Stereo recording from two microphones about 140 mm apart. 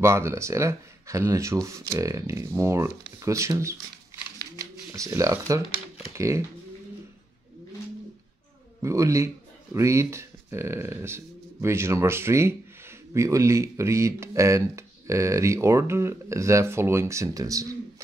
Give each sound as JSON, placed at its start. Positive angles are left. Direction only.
{"t": 0.0, "sound": "speech", "side_deg": -20}
{"t": 8.8, "sound": "speech", "side_deg": -20}